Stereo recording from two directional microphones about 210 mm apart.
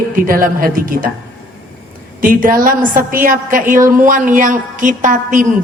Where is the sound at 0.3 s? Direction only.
45° right (ahead or behind).